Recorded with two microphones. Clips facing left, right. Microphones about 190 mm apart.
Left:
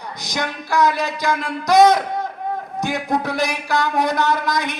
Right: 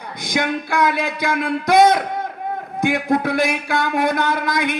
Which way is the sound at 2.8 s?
55° right (ahead or behind).